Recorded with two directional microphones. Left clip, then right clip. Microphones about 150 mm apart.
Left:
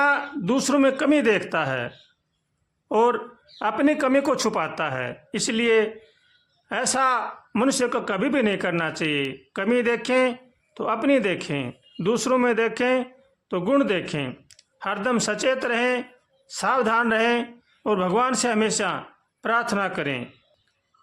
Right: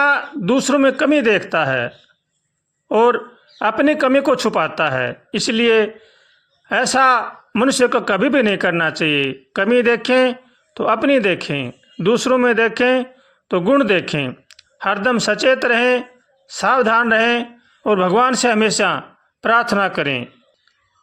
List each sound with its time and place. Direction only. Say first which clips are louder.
0.0 s speech: right 5 dB; 20° right (ahead or behind)
2.9 s speech: right 6 dB; 25° right (ahead or behind)